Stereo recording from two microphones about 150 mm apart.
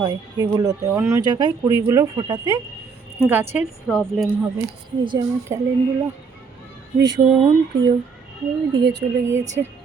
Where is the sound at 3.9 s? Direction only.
Centre (ahead or behind).